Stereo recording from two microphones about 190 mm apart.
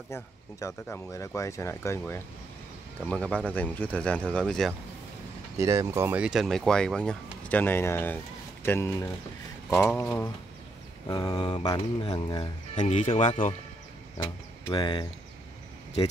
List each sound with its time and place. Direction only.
0.1 s speech: 15° left (ahead or behind)
5.6 s speech: 15° right (ahead or behind); by 10.3 s 15° left (ahead or behind)
11.1 s mantra: 20° left (ahead or behind)
12.7 s speech: 40° left (ahead or behind)
14.1 s speech: 20° left (ahead or behind)